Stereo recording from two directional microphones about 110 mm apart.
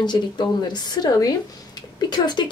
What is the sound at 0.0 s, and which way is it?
A woman's voice, 45° left (ahead or behind).